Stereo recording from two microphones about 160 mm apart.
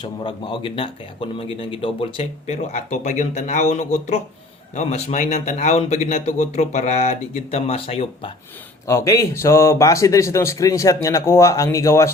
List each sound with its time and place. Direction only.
0.0 s speech: 30° left (ahead or behind)
8.9 s speech: 20° left (ahead or behind)